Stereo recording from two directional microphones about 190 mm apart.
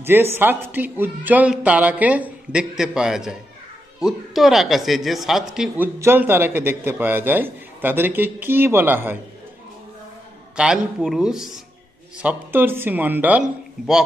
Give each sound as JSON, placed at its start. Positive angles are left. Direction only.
{"t": 0.0, "sound": "a man's voice", "side_deg": -10}
{"t": 10.5, "sound": "a man's voice", "side_deg": -5}